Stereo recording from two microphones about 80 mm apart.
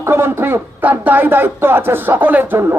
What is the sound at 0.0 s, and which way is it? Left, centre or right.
Speech, right.